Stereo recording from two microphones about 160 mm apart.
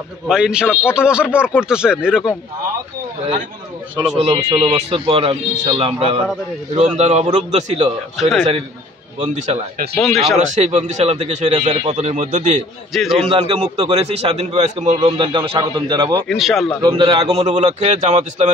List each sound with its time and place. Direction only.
0.3 s speech: 5° right (ahead or behind)
4.6 s a man's voice: 40° right (ahead or behind)
8.2 s speech: centre (ahead or behind)
9.2 s speech: 45° right (ahead or behind)
10.0 s speech: centre (ahead or behind)
10.5 s speech: 45° right (ahead or behind)
12.9 s speech: centre (ahead or behind)
13.3 s a man's voice: 35° right (ahead or behind)
16.2 s speech: centre (ahead or behind)
16.8 s a man's voice: 30° right (ahead or behind)
17.3 s speech: 45° right (ahead or behind)